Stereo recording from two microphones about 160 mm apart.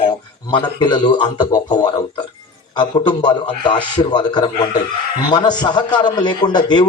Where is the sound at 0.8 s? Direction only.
30° left (ahead or behind).